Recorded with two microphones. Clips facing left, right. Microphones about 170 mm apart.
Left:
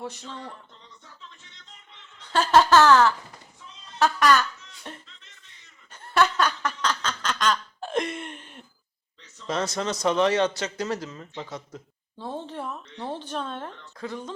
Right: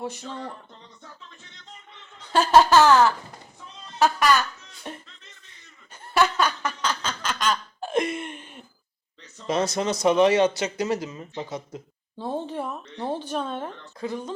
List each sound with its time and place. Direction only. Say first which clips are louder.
0.0 s speech: right 3 dB; 10° right (ahead or behind)
0.3 s speech: right 4 dB; 45° right (ahead or behind)
2.3 s speech: right 1 dB; 10° right (ahead or behind)
3.9 s a sound: even; 10° right (ahead or behind)
5.9 s quack: even; 5° right (ahead or behind)
9.5 s speech: right 3 dB; 15° right (ahead or behind)